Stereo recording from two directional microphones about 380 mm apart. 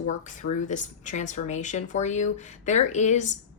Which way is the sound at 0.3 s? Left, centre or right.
Centre.